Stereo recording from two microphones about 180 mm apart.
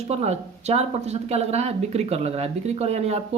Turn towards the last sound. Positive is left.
turn(degrees=-35)  # may be behind; listen again after turning